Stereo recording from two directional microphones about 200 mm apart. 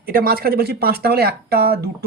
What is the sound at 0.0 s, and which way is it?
Speech, 45° right (ahead or behind).